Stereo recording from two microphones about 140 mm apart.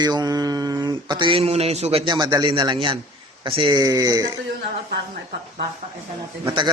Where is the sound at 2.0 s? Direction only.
30° right (ahead or behind).